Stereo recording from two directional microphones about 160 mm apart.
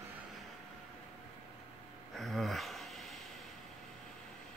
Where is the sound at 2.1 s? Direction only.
Centre (ahead or behind).